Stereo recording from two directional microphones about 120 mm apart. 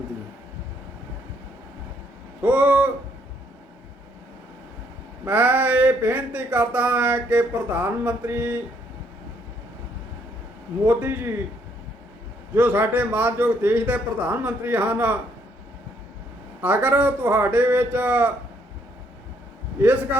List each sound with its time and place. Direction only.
2.4 s a sound: 15° right (ahead or behind)
5.2 s speech: 15° right (ahead or behind)
10.8 s speech: 15° right (ahead or behind)
12.5 s speech: 15° right (ahead or behind)
16.6 s speech: 15° right (ahead or behind)
19.8 s speech: 15° right (ahead or behind)